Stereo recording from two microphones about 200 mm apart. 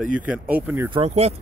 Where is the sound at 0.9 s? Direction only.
30° right (ahead or behind).